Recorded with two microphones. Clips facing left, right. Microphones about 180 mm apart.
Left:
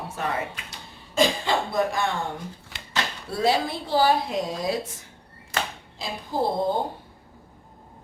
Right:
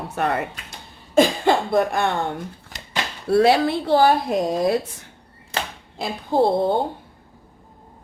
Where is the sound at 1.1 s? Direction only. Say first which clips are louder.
Right 6 dB; 55° right (ahead or behind).